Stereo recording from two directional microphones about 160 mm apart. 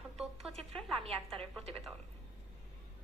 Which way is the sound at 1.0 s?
40° right (ahead or behind).